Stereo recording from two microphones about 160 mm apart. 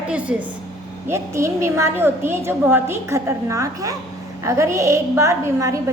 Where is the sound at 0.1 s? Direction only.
5° right (ahead or behind).